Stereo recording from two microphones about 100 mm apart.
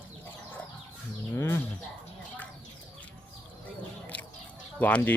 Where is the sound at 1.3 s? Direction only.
25° left (ahead or behind).